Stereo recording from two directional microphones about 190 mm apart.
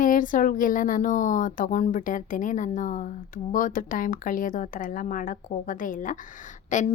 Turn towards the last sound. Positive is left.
turn(degrees=40)  # may be behind; listen again after turning